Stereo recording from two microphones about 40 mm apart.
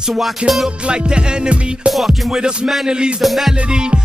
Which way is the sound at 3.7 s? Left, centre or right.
Right.